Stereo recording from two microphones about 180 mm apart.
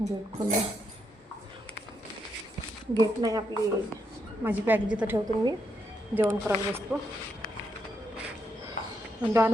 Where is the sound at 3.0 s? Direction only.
20° right (ahead or behind).